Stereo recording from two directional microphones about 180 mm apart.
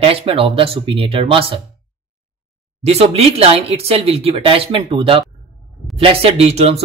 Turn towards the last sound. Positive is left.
turn(degrees=-35)  # may be behind; listen again after turning